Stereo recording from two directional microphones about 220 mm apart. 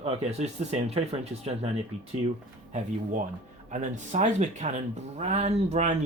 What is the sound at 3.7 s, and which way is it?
Speech, 35° right (ahead or behind).